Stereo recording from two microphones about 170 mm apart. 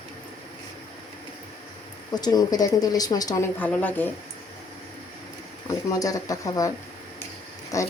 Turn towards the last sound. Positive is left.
turn(degrees=20)  # may be behind; listen again after turning